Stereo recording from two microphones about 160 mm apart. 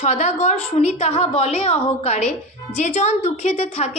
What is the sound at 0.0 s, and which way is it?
A woman's voice, 45° left (ahead or behind).